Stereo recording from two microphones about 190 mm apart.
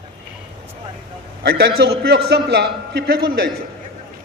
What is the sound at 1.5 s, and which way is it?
A man's voice, 60° right (ahead or behind).